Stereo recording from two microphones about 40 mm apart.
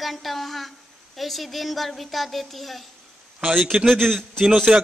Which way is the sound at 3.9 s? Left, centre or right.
Centre.